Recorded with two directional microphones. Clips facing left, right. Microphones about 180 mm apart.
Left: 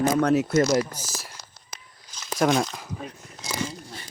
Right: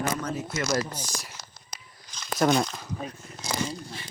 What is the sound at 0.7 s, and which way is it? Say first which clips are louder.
Speech: left 4 dB; 10° left (ahead or behind).